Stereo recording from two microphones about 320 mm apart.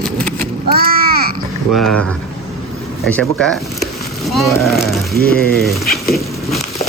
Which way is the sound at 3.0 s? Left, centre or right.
Centre.